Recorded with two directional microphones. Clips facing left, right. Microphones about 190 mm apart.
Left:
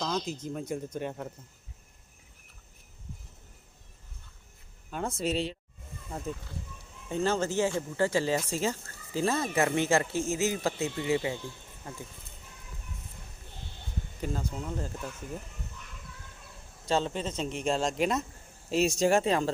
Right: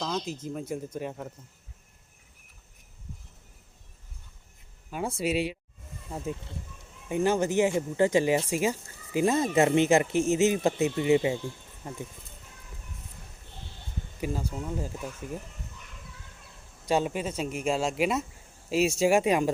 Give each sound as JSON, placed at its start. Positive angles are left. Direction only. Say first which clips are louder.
{"t": 0.0, "sound": "speech", "louder": "even", "side_deg": -5}
{"t": 4.9, "sound": "speech", "louder": "right 2 dB", "side_deg": -10}
{"t": 14.2, "sound": "speech", "louder": "right 2 dB", "side_deg": -10}
{"t": 16.8, "sound": "speech", "louder": "right 2 dB", "side_deg": -10}